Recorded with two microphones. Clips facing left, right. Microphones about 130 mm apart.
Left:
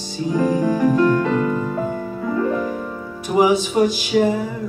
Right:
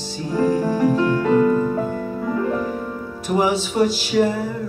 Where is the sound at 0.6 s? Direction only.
5° right (ahead or behind).